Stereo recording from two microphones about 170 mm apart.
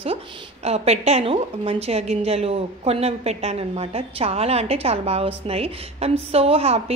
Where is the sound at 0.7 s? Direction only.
40° right (ahead or behind).